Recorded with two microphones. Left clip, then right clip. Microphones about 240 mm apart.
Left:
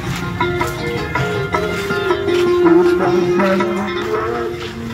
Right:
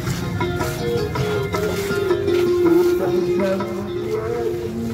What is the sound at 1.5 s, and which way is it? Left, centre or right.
Music, centre.